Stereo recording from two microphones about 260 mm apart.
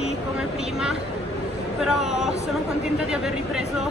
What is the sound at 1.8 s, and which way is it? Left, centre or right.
Speech, centre.